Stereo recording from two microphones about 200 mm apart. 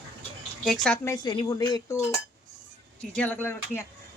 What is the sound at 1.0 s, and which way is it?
Speech, 20° left (ahead or behind).